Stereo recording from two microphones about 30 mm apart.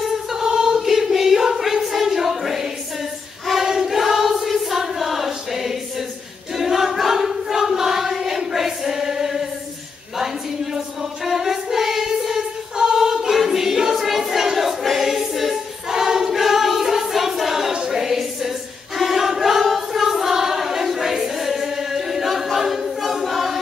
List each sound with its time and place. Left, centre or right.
0.3 s choir: centre
11.2 s choir: centre
17.4 s a sound: centre
18.9 s choir: centre
19.9 s music: centre
23.2 s choir: centre